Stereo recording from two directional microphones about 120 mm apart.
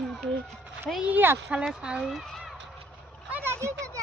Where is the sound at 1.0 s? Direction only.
15° right (ahead or behind).